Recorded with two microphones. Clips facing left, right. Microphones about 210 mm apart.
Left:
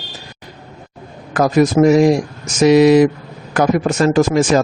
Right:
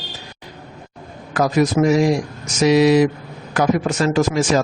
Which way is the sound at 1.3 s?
45° left (ahead or behind).